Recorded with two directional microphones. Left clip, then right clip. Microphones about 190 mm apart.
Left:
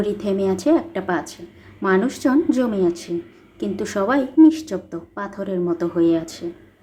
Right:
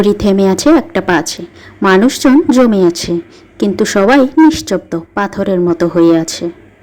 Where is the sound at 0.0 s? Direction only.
35° right (ahead or behind).